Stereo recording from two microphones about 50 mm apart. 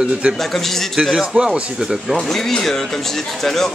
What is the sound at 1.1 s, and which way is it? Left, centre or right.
Speech, centre.